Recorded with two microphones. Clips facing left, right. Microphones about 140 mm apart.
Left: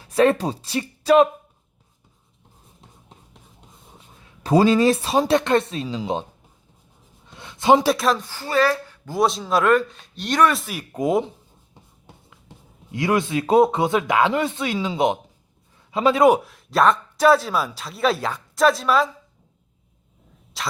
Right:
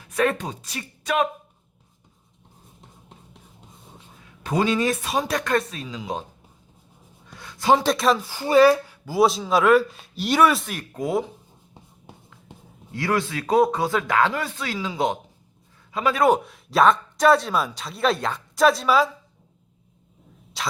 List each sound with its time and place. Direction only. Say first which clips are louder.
0.0 s speech: left 6 dB; 30° left (ahead or behind)
4.4 s speech: left 6 dB; 35° left (ahead or behind)
7.3 s a sound: left 3 dB; 25° left (ahead or behind)
7.9 s speech: even; centre (ahead or behind)
8.2 s speech: right 5 dB; 15° right (ahead or behind); by 10.8 s 5° left (ahead or behind)
10.9 s speech: left 4 dB; 20° left (ahead or behind)
12.9 s speech: left 3 dB; 15° left (ahead or behind)
16.4 s speech: even; centre (ahead or behind)
20.6 s a sound: even; centre (ahead or behind)